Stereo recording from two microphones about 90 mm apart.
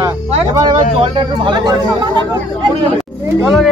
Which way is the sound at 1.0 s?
60° right (ahead or behind).